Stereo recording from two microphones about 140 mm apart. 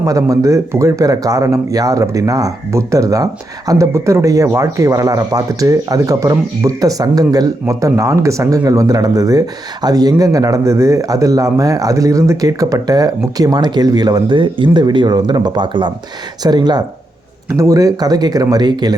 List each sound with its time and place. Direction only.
0.0 s a man's voice: 25° right (ahead or behind)